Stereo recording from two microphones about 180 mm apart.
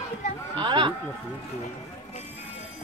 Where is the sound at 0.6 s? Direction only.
25° right (ahead or behind).